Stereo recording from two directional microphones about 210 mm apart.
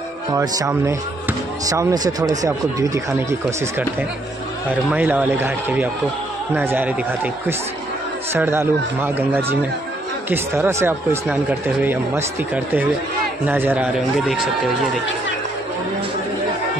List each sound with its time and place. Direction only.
0.3 s speech: 15° right (ahead or behind)
8.3 s a man's voice: 10° right (ahead or behind)